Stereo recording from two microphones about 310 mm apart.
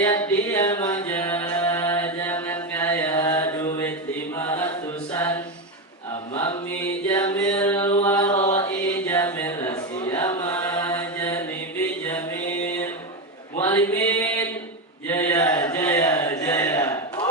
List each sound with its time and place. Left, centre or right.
0.0 s music: centre
4.4 s mantra: centre
5.1 s a sound: centre
6.3 s mantra: centre
8.0 s chant: centre
8.5 s mantra: centre
12.0 s a sound: centre
13.6 s mantra: centre
15.0 s a sound: centre